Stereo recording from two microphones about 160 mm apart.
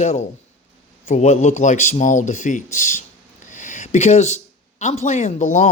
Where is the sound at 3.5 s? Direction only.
50° left (ahead or behind).